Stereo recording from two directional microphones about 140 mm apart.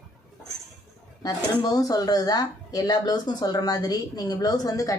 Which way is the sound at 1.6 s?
25° left (ahead or behind).